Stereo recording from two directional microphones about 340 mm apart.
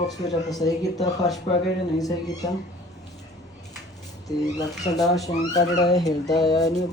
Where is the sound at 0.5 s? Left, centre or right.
Centre.